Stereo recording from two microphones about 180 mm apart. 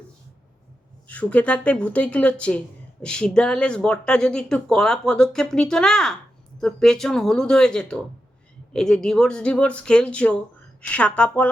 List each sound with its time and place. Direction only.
1.0 s speech: 10° left (ahead or behind)